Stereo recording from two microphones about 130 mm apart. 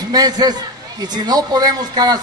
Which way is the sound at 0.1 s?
30° right (ahead or behind).